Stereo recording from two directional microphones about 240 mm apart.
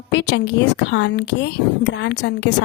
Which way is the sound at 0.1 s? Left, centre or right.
Left.